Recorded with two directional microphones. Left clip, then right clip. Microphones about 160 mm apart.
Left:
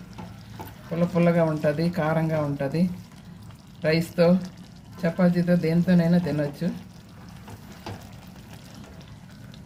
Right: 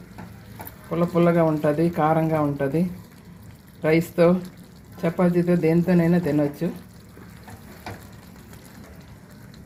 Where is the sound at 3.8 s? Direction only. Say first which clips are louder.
Right 3 dB; 40° right (ahead or behind).